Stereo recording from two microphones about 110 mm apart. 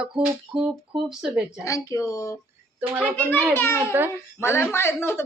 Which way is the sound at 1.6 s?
30° left (ahead or behind).